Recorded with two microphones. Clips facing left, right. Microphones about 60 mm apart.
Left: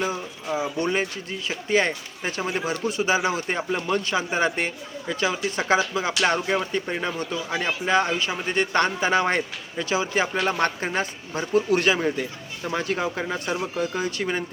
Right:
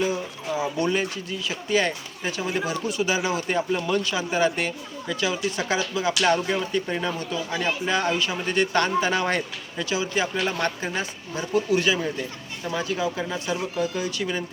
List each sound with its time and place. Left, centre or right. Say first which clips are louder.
0.8 s speech: even; left